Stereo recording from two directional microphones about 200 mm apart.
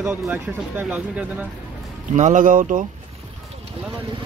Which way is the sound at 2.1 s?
40° right (ahead or behind).